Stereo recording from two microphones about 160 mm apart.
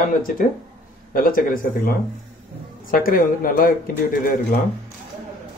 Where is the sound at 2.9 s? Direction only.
60° left (ahead or behind).